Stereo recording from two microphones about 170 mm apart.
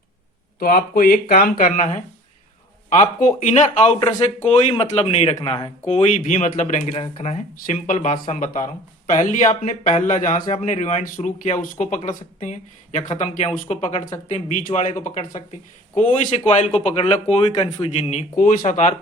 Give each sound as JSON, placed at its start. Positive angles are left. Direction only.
{"t": 0.6, "sound": "speech", "side_deg": 55}
{"t": 5.4, "sound": "speech", "side_deg": 25}
{"t": 5.8, "sound": "speech", "side_deg": 40}
{"t": 16.0, "sound": "speech", "side_deg": 45}